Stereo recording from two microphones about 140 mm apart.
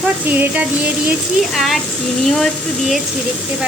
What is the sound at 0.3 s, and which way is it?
Speech, 15° right (ahead or behind).